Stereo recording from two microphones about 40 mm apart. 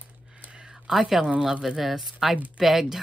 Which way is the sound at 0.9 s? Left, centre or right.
Centre.